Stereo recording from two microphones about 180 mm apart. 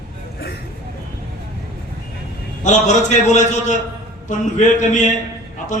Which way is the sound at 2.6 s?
40° left (ahead or behind).